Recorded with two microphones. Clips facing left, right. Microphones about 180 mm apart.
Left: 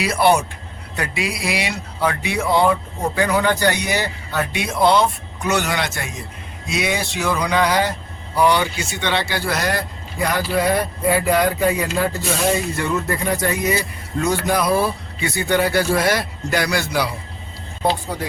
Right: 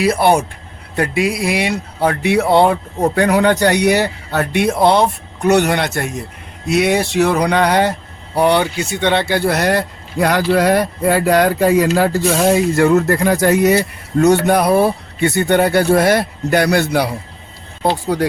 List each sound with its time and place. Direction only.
0.0 s a man's voice: 55° right (ahead or behind); by 13.8 s 70° right (ahead or behind)
14.4 s a man's voice: 60° right (ahead or behind)
17.8 s speech: 75° right (ahead or behind)